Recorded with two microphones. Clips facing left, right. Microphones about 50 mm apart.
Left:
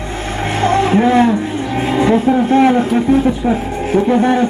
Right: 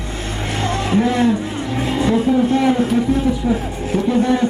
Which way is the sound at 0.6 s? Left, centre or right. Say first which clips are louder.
Left 6 dB; left.